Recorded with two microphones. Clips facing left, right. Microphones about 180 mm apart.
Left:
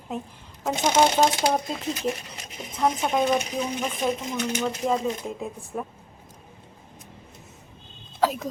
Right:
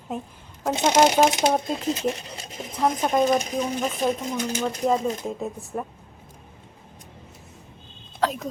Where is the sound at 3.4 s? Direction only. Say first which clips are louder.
Right 2 dB; 35° right (ahead or behind).